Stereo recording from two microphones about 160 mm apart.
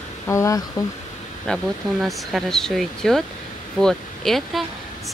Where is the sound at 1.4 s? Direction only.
Centre (ahead or behind).